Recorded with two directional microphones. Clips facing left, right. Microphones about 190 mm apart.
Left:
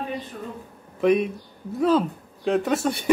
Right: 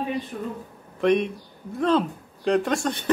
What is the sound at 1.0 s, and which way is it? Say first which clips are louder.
Speech: left 1 dB; 5° left (ahead or behind).